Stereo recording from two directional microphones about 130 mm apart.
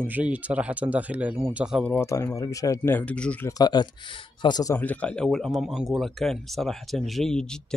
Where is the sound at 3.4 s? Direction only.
30° left (ahead or behind).